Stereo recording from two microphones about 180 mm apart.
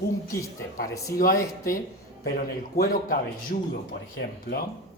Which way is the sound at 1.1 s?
50° left (ahead or behind).